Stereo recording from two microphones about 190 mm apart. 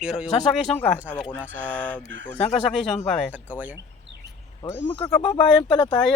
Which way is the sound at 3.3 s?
10° right (ahead or behind).